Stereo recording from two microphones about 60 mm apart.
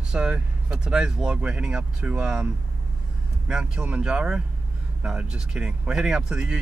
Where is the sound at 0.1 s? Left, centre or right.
Centre.